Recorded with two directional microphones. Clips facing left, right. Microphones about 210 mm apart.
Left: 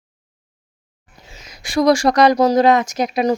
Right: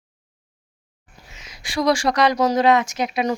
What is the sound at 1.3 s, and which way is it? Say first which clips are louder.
Speech: left 8 dB; 40° left (ahead or behind).